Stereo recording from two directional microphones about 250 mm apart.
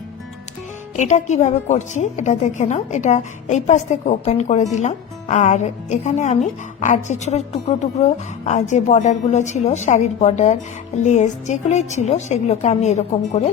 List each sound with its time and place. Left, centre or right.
0.9 s a woman's voice: left